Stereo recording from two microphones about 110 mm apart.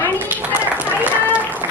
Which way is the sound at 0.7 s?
15° right (ahead or behind).